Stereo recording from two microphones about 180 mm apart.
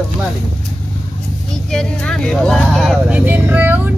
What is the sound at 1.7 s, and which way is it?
Speech, 5° left (ahead or behind).